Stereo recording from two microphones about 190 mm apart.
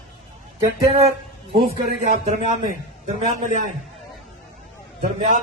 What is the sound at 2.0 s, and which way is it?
A man's voice, 40° right (ahead or behind).